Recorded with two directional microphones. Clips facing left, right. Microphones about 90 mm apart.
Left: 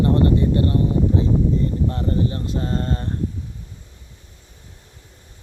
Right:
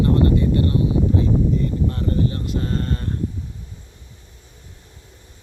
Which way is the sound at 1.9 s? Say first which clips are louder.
Even; 25° left (ahead or behind).